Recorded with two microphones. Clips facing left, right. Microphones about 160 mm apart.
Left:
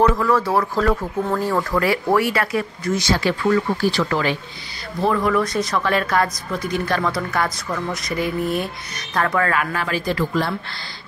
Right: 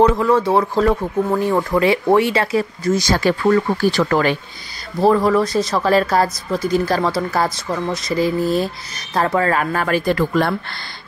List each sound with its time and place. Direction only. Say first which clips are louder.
0.1 s speech: right 3 dB; 25° right (ahead or behind)
3.1 s speech: right 2 dB; 45° right (ahead or behind)
5.0 s speech: right 5 dB; 35° right (ahead or behind)
9.8 s speech: right 5 dB; 55° right (ahead or behind)